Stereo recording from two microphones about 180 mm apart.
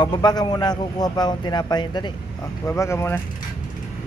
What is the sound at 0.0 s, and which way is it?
Speech, 25° left (ahead or behind).